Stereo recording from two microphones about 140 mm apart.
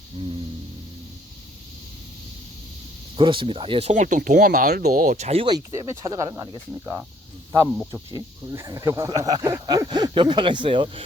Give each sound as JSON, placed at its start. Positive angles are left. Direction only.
{"t": 0.2, "sound": "music", "side_deg": -35}
{"t": 3.2, "sound": "speech", "side_deg": -35}
{"t": 5.5, "sound": "speech", "side_deg": -25}
{"t": 8.1, "sound": "speech", "side_deg": -25}